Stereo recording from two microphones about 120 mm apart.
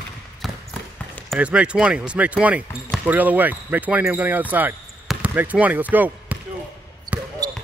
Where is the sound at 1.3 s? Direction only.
10° right (ahead or behind).